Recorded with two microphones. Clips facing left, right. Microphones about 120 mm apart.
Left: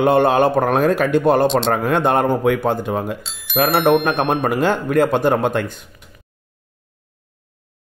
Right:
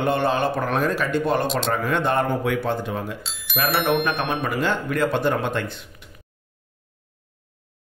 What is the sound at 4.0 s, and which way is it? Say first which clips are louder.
A man's voice: left 6 dB; 45° left (ahead or behind).